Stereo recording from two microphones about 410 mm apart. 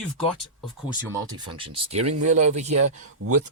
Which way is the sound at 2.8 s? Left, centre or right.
Right.